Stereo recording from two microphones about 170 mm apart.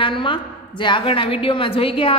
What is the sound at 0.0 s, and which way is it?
A woman's voice, 30° left (ahead or behind).